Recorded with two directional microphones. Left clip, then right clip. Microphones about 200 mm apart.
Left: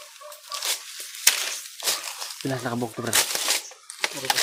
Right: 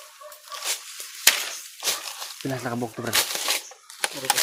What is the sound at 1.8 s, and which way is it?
Crumpling, 5° left (ahead or behind).